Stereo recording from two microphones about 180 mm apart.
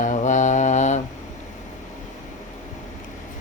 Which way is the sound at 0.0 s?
45° left (ahead or behind).